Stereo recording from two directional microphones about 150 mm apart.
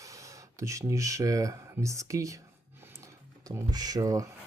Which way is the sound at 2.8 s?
20° right (ahead or behind).